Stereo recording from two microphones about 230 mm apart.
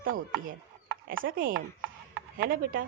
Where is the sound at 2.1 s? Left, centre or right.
Right.